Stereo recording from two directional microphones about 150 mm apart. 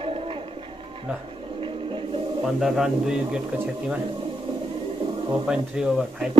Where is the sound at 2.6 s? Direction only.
5° right (ahead or behind).